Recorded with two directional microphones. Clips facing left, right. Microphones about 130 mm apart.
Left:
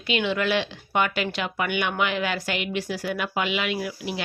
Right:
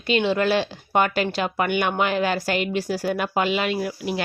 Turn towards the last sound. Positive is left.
turn(degrees=-45)  # may be behind; listen again after turning